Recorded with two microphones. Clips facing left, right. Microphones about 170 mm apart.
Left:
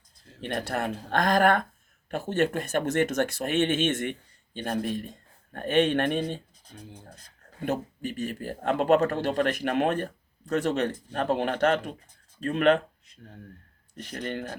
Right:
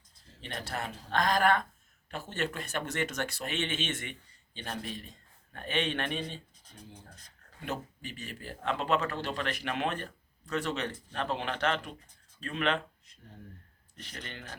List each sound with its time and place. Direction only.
0.4 s speech: 55° left (ahead or behind)
7.6 s speech: 45° left (ahead or behind)
13.9 s speech: 50° left (ahead or behind)